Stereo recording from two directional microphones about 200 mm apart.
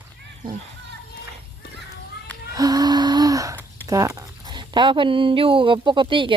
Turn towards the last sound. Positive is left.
turn(degrees=-25)  # may be behind; listen again after turning